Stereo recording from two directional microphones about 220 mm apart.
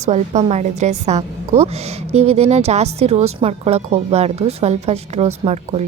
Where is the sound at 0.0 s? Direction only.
30° right (ahead or behind).